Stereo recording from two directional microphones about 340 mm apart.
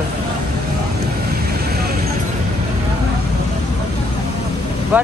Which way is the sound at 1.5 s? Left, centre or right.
Right.